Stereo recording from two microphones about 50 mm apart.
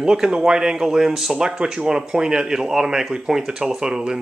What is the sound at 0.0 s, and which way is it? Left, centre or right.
Speech, centre.